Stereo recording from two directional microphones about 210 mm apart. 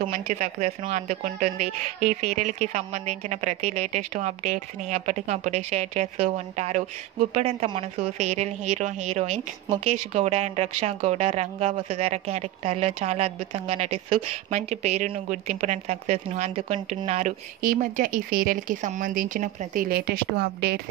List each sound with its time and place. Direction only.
0.3 s speech: 35° right (ahead or behind)